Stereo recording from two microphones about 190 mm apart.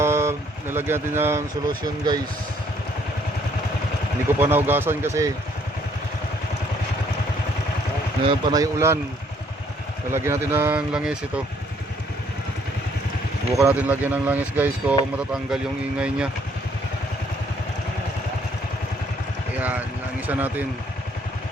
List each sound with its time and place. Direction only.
0.0 s speech: 15° right (ahead or behind)
4.4 s speech: 10° right (ahead or behind)
8.2 s speech: 25° right (ahead or behind)
10.1 s speech: 15° right (ahead or behind)
13.6 s speech: 10° right (ahead or behind)
20.2 s speech: 10° right (ahead or behind)